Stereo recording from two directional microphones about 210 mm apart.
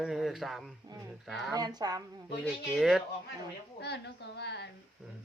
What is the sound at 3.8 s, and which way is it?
Speech, 55° left (ahead or behind).